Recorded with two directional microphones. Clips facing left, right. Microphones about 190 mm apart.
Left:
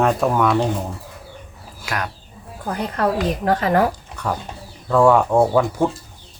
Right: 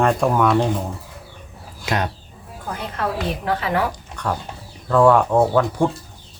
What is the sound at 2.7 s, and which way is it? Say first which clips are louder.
A woman's voice: left 5 dB; 40° left (ahead or behind).